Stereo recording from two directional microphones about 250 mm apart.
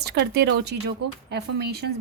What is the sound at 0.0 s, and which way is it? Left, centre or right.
Speech, right.